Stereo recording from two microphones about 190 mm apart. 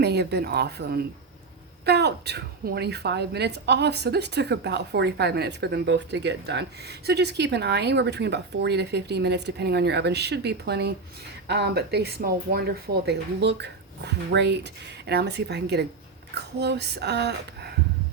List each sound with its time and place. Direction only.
0.0 s a woman's voice: 60° right (ahead or behind)